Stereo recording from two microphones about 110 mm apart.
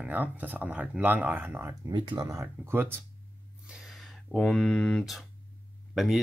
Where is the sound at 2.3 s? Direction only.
25° right (ahead or behind).